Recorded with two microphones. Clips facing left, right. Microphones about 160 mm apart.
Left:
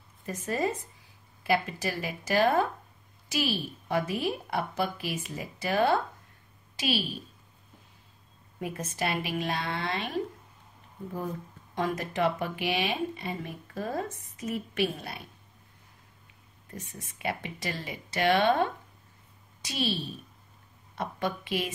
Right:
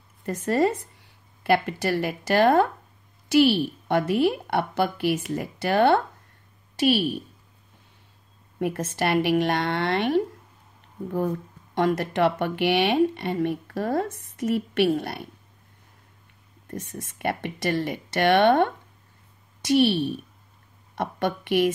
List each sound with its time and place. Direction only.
0.2 s speech: 70° right (ahead or behind)
6.9 s speech: 60° right (ahead or behind)
8.5 s speech: 70° right (ahead or behind)
11.7 s speech: 70° right (ahead or behind)
16.6 s speech: 75° right (ahead or behind)